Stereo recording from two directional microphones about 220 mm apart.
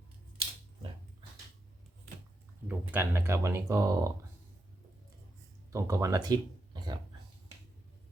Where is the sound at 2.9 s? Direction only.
10° right (ahead or behind).